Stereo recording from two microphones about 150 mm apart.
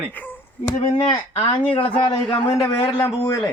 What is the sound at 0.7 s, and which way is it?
Speech, 40° left (ahead or behind).